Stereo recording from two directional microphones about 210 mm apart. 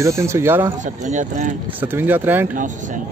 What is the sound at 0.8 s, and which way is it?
Speech, 35° right (ahead or behind).